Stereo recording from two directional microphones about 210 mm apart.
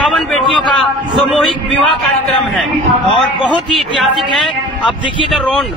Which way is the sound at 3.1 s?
Centre (ahead or behind).